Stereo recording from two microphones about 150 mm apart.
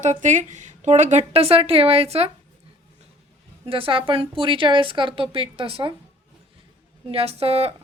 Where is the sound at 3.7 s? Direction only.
35° right (ahead or behind).